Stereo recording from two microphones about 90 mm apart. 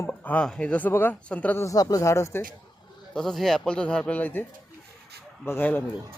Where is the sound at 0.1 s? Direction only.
20° left (ahead or behind).